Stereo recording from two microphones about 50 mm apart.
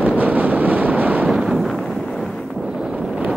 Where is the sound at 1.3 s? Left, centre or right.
Centre.